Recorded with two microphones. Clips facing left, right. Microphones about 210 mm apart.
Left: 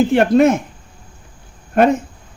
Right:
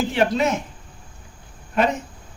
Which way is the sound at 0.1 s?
55° left (ahead or behind).